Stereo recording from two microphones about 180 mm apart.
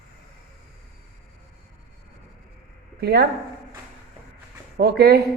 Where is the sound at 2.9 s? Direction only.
60° right (ahead or behind).